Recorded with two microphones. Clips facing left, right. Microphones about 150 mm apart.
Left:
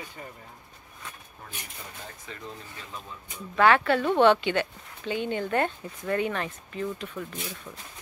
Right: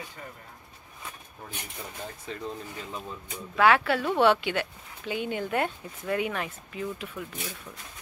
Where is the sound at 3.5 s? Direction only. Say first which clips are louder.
Left 1 dB; 5° right (ahead or behind).